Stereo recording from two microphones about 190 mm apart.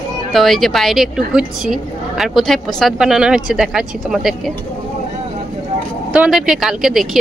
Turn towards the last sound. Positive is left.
turn(degrees=0)  # may be behind; listen again after turning